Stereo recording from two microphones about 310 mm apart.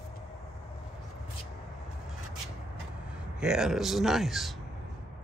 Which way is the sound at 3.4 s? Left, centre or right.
Centre.